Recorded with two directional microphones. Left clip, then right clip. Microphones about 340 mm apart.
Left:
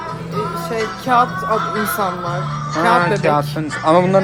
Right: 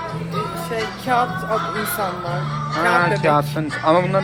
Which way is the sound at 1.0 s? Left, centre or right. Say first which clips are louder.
Left 5 dB; left.